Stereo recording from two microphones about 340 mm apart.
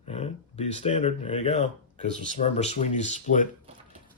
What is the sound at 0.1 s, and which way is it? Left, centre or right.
Speech, centre.